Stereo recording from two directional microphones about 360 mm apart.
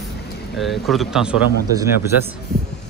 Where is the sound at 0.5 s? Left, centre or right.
Centre.